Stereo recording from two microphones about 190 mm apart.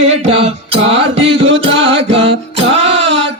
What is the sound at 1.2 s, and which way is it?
Music, 85° right.